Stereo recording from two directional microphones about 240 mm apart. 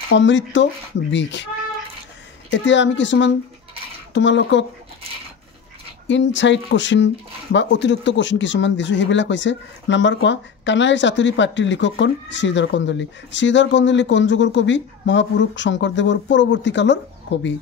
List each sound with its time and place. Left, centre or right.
0.1 s speech: left
2.5 s speech: left
6.0 s speech: left